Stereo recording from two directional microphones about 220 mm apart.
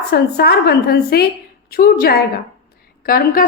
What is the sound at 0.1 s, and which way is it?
A woman's voice, 45° left (ahead or behind).